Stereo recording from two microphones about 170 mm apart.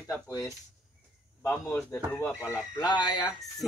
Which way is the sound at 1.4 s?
15° left (ahead or behind).